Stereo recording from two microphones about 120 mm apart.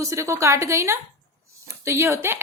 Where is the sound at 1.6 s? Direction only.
20° right (ahead or behind).